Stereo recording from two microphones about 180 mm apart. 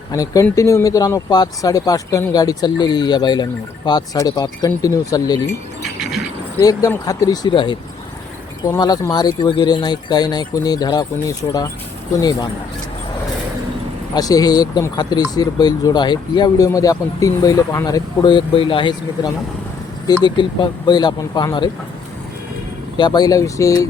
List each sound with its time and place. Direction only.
0.1 s speech: 20° left (ahead or behind)
6.0 s keys jangling: centre (ahead or behind)
6.6 s speech: 20° left (ahead or behind)
14.1 s speech: 20° left (ahead or behind)
23.0 s speech: 25° left (ahead or behind)